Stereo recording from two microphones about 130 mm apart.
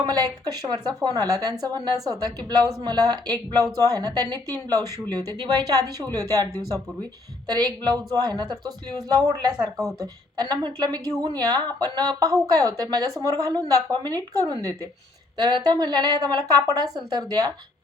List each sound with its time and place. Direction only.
0.0 s a woman's voice: 30° right (ahead or behind)
5.5 s a woman's voice: 30° right (ahead or behind)